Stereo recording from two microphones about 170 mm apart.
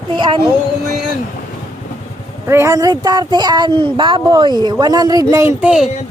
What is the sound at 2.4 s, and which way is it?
Speech, 15° right (ahead or behind).